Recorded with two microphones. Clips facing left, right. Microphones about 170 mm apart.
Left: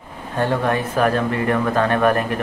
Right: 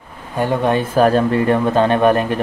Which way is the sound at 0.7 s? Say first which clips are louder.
Right 5 dB; 30° right (ahead or behind).